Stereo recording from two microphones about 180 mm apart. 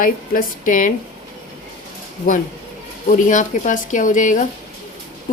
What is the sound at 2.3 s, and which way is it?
Speech, 50° left (ahead or behind).